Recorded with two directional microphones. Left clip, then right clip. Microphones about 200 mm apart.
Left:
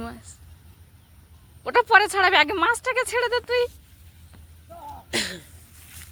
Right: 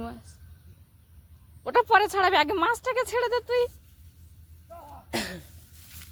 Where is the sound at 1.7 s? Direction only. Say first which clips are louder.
Left 3 dB; centre (ahead or behind).